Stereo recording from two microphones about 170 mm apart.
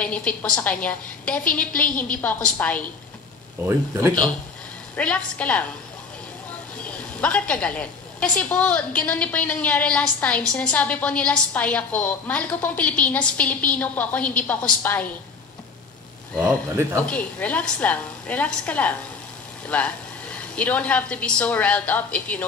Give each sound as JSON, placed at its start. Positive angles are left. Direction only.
{"t": 0.0, "sound": "a woman's voice", "side_deg": 5}
{"t": 1.9, "sound": "a woman's voice", "side_deg": 55}
{"t": 2.2, "sound": "a woman's voice", "side_deg": 10}
{"t": 3.6, "sound": "speech", "side_deg": -15}
{"t": 4.9, "sound": "a woman's voice", "side_deg": 5}
{"t": 6.8, "sound": "a woman's voice", "side_deg": 5}
{"t": 17.0, "sound": "a woman's voice", "side_deg": 5}